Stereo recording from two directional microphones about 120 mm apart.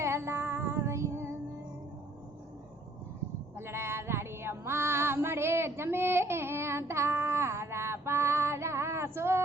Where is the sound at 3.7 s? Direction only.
20° right (ahead or behind).